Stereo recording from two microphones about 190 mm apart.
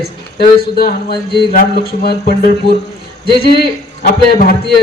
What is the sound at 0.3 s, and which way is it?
Speech, 55° left (ahead or behind).